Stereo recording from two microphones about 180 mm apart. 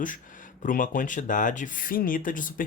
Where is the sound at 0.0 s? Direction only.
45° left (ahead or behind).